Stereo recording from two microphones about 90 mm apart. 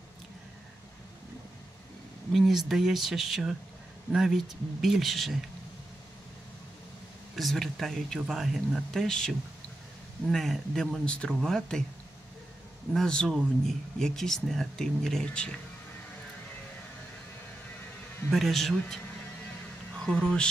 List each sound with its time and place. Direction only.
2.3 s speech: 5° right (ahead or behind)
7.3 s speech: centre (ahead or behind)
12.9 s speech: 5° left (ahead or behind)
18.3 s speech: centre (ahead or behind)
20.0 s speech: 10° left (ahead or behind)